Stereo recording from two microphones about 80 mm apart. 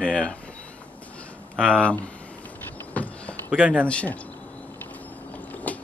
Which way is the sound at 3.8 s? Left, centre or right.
Centre.